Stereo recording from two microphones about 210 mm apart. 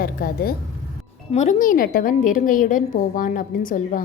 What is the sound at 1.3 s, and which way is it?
A woman's voice, 35° left (ahead or behind).